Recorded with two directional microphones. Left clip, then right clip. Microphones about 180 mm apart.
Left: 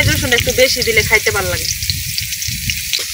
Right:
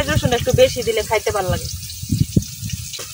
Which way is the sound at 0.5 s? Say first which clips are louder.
Left 1 dB; 5° left (ahead or behind).